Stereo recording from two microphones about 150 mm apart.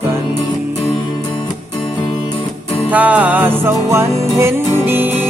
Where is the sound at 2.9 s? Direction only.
10° right (ahead or behind).